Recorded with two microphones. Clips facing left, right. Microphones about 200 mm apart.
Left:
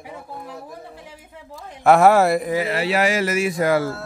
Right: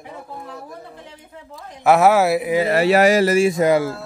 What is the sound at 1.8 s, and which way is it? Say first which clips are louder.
Speech: even; centre (ahead or behind).